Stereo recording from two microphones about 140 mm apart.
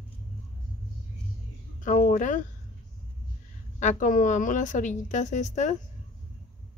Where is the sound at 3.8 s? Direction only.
60° left (ahead or behind).